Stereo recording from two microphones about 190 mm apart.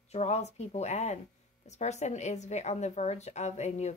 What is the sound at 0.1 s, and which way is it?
A woman's voice, 35° left (ahead or behind).